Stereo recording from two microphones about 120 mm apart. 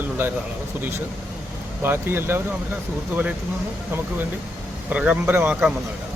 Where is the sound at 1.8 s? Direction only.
20° right (ahead or behind).